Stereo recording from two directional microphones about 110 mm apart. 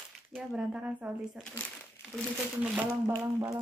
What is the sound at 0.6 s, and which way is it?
Speech, 10° right (ahead or behind).